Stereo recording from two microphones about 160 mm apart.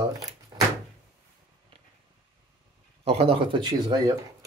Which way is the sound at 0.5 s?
25° right (ahead or behind).